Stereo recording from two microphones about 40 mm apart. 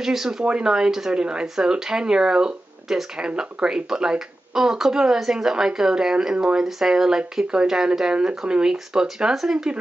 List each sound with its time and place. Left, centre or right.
0.0 s speech: centre